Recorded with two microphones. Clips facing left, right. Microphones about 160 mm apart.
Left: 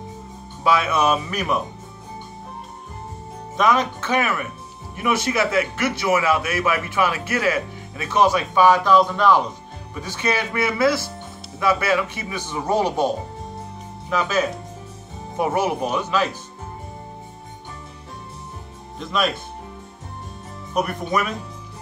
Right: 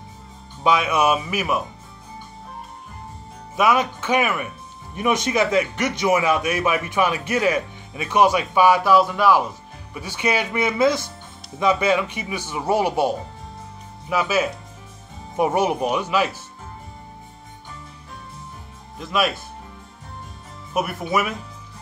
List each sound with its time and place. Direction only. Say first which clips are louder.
0.7 s speech: even; 15° right (ahead or behind)
3.5 s speech: even; 10° right (ahead or behind)
18.9 s speech: even; 5° right (ahead or behind)
20.7 s speech: even; 5° right (ahead or behind)